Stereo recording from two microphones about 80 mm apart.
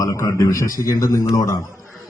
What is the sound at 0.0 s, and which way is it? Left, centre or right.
A man's voice, left.